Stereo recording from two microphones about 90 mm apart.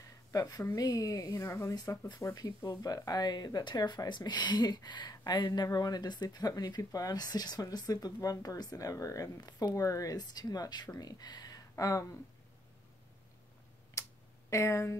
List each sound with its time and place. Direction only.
0.3 s speech: 40° left (ahead or behind)
14.0 s tick-tock: 35° left (ahead or behind)
14.5 s speech: 35° left (ahead or behind)